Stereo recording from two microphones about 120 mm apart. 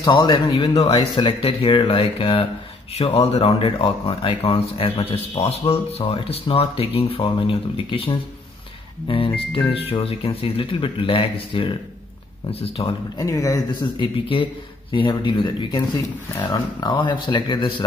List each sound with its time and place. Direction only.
0.0 s speech: 40° left (ahead or behind)
0.9 s speech: 40° left (ahead or behind)
13.2 s speech: 30° left (ahead or behind)
16.8 s speech: 35° left (ahead or behind)